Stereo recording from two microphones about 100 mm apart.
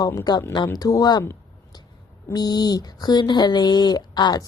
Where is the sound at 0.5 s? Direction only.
45° left (ahead or behind).